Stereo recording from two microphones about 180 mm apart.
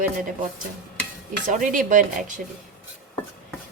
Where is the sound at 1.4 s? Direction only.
45° right (ahead or behind).